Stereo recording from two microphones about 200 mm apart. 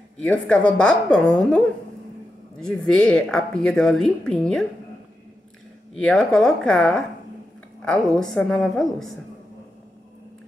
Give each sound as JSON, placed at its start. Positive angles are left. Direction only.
{"t": 0.2, "sound": "speech", "side_deg": 5}
{"t": 2.6, "sound": "speech", "side_deg": 5}
{"t": 5.9, "sound": "speech", "side_deg": 5}